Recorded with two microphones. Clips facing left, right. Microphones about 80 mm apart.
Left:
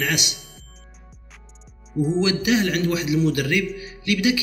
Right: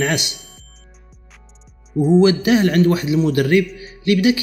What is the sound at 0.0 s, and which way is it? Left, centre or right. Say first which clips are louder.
Speech: right 5 dB; right.